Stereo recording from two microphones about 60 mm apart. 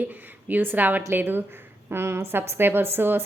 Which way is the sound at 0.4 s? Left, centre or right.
Right.